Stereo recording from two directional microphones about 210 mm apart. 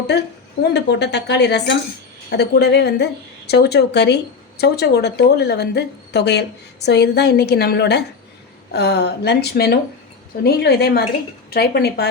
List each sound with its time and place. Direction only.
0.1 s speech: 50° left (ahead or behind)